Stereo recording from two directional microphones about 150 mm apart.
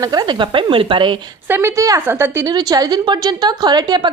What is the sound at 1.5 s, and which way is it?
Speech, 15° right (ahead or behind).